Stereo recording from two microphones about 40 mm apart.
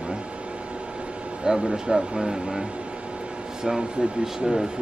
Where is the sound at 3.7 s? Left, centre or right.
Centre.